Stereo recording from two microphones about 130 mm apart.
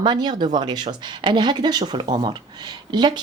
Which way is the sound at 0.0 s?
35° right (ahead or behind).